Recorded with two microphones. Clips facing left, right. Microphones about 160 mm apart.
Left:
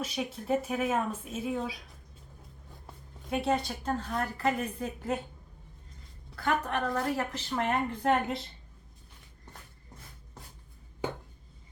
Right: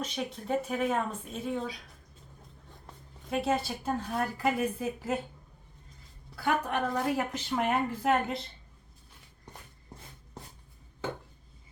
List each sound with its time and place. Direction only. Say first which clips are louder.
0.0 s speech: left 1 dB; 5° left (ahead or behind)
2.8 s a woman's voice: left 1 dB; centre (ahead or behind)
6.3 s a woman's voice: right 1 dB; 10° right (ahead or behind)
9.5 s shuffle: right 2 dB; 15° right (ahead or behind)